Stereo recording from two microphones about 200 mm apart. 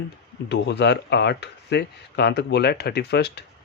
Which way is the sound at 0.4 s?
60° left (ahead or behind).